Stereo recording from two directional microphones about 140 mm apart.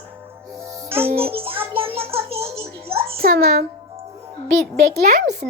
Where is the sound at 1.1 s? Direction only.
45° right (ahead or behind).